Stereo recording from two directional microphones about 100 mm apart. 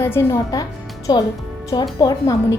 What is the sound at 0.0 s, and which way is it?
A woman's voice, 25° left (ahead or behind).